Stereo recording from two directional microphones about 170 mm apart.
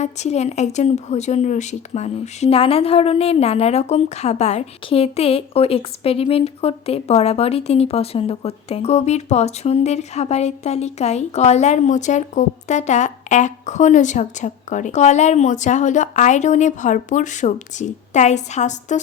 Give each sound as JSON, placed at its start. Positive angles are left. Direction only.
{"t": 0.0, "sound": "speech", "side_deg": 40}